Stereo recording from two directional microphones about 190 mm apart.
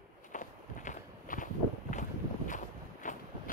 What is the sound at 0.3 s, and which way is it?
Walk, 40° left (ahead or behind).